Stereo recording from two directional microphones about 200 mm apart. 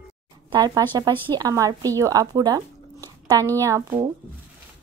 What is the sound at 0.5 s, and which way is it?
A woman's voice, 20° right (ahead or behind).